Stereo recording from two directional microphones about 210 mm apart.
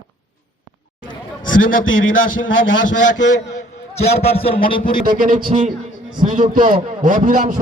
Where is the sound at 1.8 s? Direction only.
70° left (ahead or behind).